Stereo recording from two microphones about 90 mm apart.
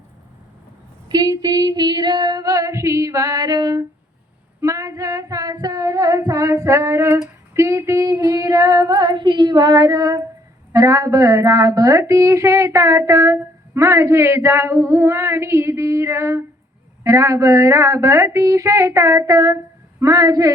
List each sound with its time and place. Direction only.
1.1 s female singing: 45° right (ahead or behind)
4.6 s female singing: 35° right (ahead or behind)
10.7 s speech: 35° right (ahead or behind)